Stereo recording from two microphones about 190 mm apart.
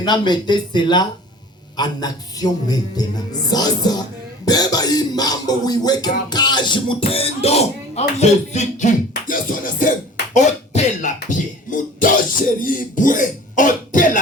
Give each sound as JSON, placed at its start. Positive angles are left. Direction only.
{"t": 0.0, "sound": "music", "side_deg": 25}
{"t": 10.3, "sound": "speech", "side_deg": 40}